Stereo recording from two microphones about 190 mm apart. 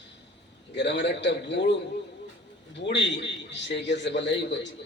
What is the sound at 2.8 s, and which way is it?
A man's voice, 70° left (ahead or behind).